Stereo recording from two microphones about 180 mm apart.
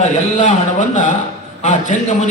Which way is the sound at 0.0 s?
40° left (ahead or behind).